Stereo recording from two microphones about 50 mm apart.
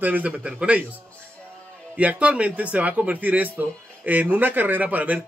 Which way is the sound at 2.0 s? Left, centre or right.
Right.